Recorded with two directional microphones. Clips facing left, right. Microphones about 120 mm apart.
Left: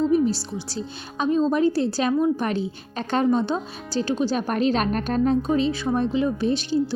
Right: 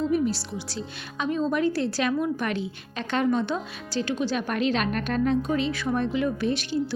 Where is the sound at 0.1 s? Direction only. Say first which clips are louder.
Left 4 dB; 30° left (ahead or behind).